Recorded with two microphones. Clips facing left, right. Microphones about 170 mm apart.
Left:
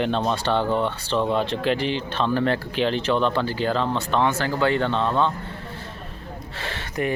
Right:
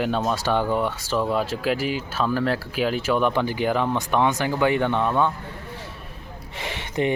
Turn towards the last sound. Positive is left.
turn(degrees=-20)  # may be behind; listen again after turning